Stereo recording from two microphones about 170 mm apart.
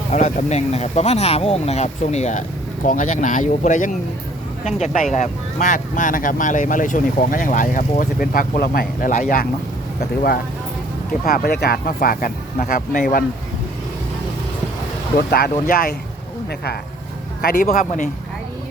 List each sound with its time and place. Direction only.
0.1 s speech: 45° left (ahead or behind)
5.1 s speech: 45° left (ahead or behind)
11.3 s speech: 65° left (ahead or behind)
15.3 s speech: 65° left (ahead or behind)
17.4 s speech: 55° left (ahead or behind)